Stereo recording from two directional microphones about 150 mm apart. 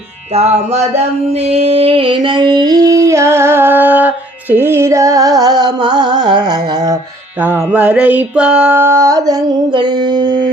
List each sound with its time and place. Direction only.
0.3 s music: 45° right (ahead or behind)
1.5 s a sound: 40° right (ahead or behind)
7.4 s music: 15° right (ahead or behind); by 10.5 s 30° right (ahead or behind)